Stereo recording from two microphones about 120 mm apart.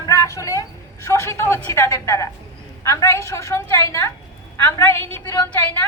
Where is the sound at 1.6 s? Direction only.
25° left (ahead or behind).